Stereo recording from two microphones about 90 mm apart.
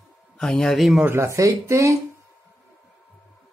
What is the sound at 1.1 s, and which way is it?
Speech, 30° right (ahead or behind).